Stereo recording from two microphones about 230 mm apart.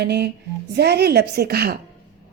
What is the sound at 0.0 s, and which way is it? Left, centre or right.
Speech, right.